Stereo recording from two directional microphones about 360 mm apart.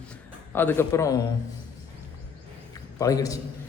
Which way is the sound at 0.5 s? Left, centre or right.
Centre.